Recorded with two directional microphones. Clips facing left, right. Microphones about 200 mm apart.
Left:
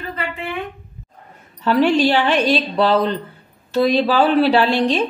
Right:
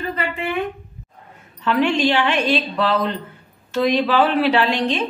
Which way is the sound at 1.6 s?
35° left (ahead or behind).